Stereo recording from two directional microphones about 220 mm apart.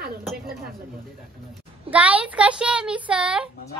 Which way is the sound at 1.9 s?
5° right (ahead or behind).